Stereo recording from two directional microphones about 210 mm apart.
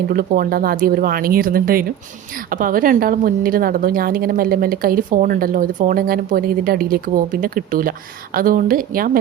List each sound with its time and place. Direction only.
0.1 s a woman's voice: 45° right (ahead or behind)